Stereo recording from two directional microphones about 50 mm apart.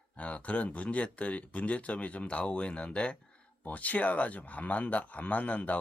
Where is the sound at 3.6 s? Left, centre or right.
Left.